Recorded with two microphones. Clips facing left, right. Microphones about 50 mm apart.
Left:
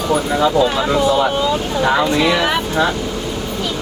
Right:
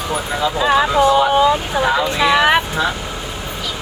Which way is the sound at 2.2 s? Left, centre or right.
Centre.